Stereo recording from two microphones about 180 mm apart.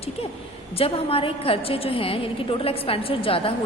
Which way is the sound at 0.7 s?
30° left (ahead or behind).